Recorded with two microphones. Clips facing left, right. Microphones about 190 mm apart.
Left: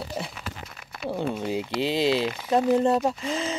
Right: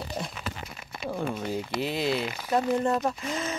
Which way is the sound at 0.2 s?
5° left (ahead or behind).